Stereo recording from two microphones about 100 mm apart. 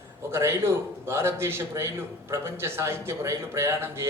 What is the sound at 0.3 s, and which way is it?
A man's voice, 25° right (ahead or behind).